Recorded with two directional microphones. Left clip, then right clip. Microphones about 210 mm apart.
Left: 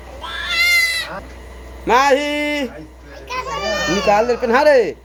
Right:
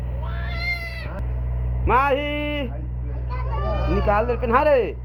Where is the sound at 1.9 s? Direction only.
10° left (ahead or behind).